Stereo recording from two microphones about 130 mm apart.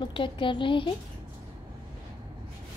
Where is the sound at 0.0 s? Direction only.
40° left (ahead or behind).